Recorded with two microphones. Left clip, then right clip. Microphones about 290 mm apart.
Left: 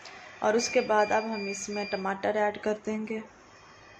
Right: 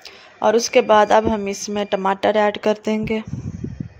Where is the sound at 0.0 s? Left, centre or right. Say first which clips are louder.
Right 10 dB; right.